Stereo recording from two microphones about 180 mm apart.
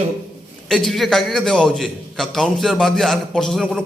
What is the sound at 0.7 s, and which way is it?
A man's voice, centre (ahead or behind).